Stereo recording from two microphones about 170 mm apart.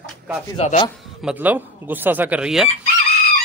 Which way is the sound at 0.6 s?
40° left (ahead or behind).